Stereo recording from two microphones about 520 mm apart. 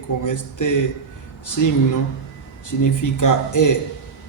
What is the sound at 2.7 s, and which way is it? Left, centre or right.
A man's voice, left.